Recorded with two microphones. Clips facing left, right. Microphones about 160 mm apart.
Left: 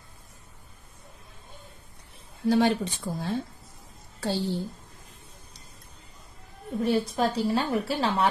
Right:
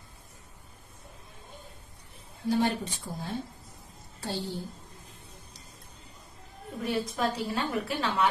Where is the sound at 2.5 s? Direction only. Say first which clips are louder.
Left 4 dB; 90° left.